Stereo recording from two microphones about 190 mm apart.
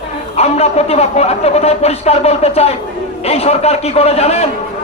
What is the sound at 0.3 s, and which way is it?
A man's voice, 35° left (ahead or behind).